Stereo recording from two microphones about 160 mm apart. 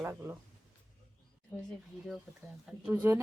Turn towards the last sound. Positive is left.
turn(degrees=-10)  # may be behind; listen again after turning